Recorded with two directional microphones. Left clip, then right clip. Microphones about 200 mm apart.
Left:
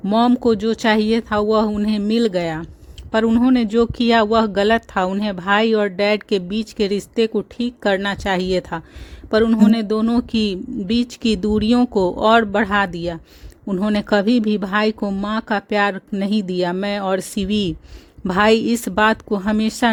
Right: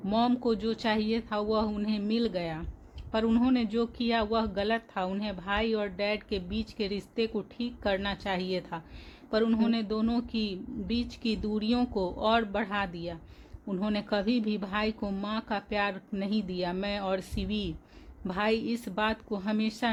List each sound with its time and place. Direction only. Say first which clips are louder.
0.0 s speech: left 12 dB; 45° left (ahead or behind)